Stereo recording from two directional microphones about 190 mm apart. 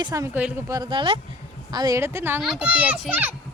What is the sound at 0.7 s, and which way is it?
A child's voice, 25° right (ahead or behind).